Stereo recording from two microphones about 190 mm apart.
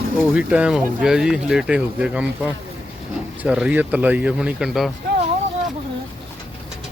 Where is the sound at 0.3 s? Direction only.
5° right (ahead or behind).